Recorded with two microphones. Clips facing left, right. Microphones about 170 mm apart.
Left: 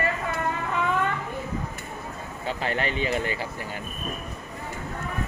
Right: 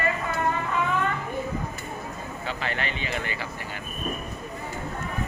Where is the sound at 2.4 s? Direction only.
45° left (ahead or behind).